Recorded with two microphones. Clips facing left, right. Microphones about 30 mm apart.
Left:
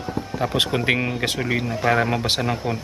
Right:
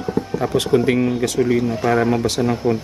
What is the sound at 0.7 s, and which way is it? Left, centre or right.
A man's voice, left.